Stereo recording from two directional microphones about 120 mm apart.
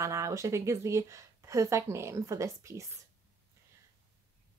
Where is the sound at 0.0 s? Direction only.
25° right (ahead or behind).